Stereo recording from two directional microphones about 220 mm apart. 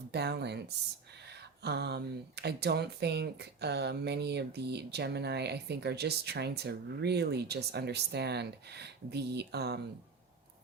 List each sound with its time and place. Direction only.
0.1 s speech: 50° right (ahead or behind)